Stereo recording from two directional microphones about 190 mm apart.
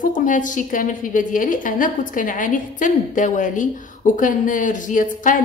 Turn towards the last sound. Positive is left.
turn(degrees=45)  # may be behind; listen again after turning